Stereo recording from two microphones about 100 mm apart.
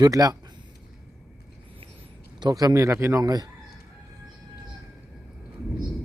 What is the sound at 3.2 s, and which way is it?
Speech, 40° right (ahead or behind).